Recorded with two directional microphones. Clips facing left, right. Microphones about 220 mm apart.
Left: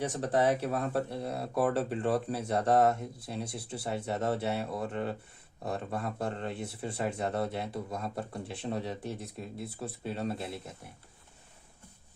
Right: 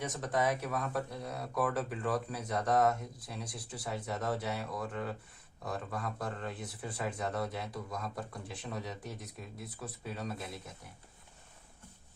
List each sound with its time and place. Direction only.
0.0 s speech: 30° left (ahead or behind)